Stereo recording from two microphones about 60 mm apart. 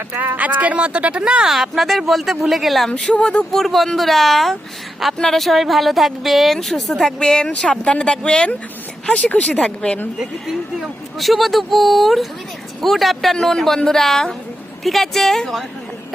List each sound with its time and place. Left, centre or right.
0.1 s a woman's voice: right; by 2.9 s centre
2.9 s speech: centre
3.5 s a woman's voice: centre
10.2 s a woman's voice: centre